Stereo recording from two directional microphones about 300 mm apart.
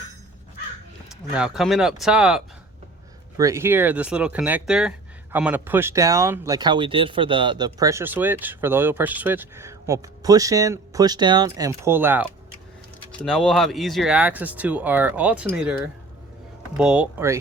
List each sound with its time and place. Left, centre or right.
1.3 s speech: centre